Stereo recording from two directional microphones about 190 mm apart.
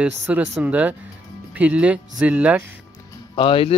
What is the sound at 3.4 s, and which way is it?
Speech, 30° left (ahead or behind).